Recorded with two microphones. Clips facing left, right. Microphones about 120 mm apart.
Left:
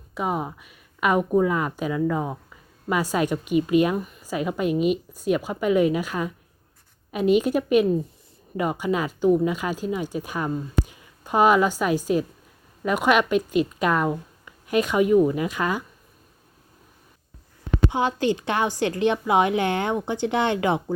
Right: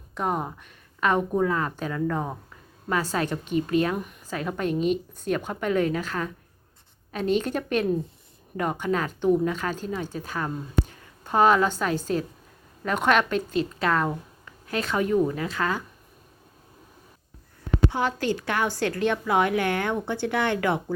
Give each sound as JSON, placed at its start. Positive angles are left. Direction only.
{"t": 0.1, "sound": "speech", "side_deg": 5}
{"t": 3.9, "sound": "a woman's voice", "side_deg": 0}
{"t": 17.9, "sound": "a woman's voice", "side_deg": 20}